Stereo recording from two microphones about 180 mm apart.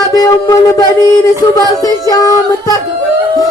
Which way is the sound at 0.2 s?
20° left (ahead or behind).